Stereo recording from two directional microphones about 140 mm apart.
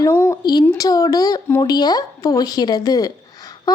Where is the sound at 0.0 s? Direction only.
20° left (ahead or behind).